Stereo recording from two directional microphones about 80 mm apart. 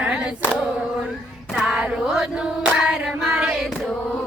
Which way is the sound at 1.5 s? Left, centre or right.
Centre.